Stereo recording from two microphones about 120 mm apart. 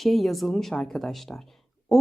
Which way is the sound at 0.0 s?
Centre (ahead or behind).